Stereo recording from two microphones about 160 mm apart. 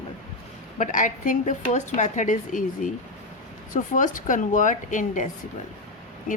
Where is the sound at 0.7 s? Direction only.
50° left (ahead or behind).